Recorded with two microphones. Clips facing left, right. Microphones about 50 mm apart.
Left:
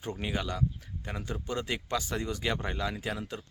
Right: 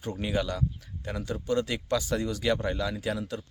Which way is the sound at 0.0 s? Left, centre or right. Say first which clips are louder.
Right 4 dB; centre.